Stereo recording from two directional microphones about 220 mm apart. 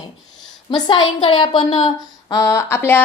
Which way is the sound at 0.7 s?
20° left (ahead or behind).